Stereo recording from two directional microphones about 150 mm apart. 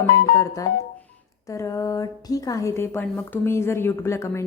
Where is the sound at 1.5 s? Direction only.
20° left (ahead or behind).